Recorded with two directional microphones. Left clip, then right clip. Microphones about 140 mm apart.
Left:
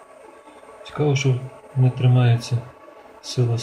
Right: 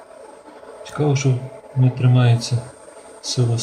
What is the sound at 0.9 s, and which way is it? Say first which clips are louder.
Speech: right 1 dB; 5° left (ahead or behind).